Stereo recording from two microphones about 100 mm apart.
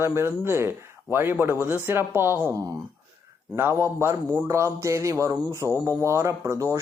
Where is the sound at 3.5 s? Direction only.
25° right (ahead or behind).